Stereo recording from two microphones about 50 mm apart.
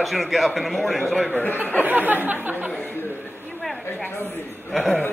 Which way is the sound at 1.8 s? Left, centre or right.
Right.